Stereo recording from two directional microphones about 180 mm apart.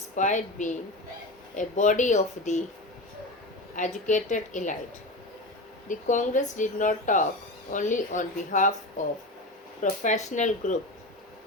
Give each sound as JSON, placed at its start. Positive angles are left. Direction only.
{"t": 0.2, "sound": "a woman's voice", "side_deg": 45}
{"t": 3.8, "sound": "a woman's voice", "side_deg": 45}
{"t": 5.9, "sound": "a woman's voice", "side_deg": 45}